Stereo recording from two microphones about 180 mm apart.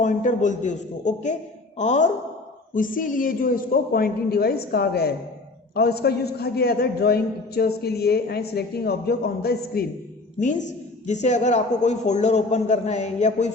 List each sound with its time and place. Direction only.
0.0 s a man's voice: 45° left (ahead or behind); by 9.8 s 60° left (ahead or behind)
10.4 s a man's voice: 45° left (ahead or behind)